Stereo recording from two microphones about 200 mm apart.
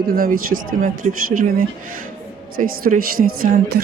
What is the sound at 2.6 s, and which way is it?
Speech, 45° right (ahead or behind).